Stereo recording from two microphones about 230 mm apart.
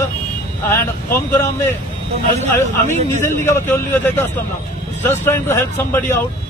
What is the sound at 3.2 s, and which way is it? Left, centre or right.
Speech, centre.